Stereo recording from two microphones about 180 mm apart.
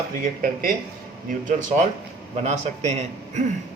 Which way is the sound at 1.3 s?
45° right (ahead or behind).